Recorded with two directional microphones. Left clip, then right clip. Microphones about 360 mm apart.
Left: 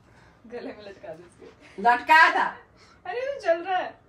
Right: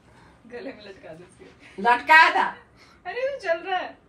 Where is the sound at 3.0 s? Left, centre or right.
Left.